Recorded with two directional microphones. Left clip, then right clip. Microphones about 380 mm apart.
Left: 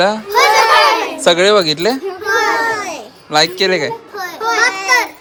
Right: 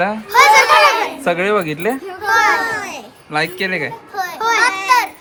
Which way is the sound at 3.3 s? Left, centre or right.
Centre.